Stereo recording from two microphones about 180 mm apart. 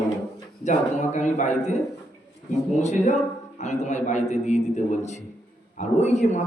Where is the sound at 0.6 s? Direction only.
40° left (ahead or behind).